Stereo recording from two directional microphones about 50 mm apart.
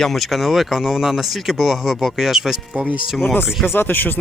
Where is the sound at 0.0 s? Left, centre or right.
Centre.